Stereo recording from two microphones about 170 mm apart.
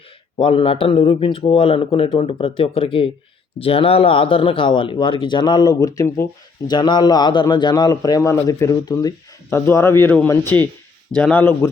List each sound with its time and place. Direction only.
0.3 s a man's voice: 30° left (ahead or behind); by 11.7 s 15° left (ahead or behind)